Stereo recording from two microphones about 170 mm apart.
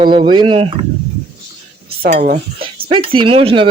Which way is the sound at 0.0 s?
30° right (ahead or behind).